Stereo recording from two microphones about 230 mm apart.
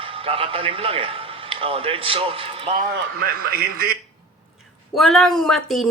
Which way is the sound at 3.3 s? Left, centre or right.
Right.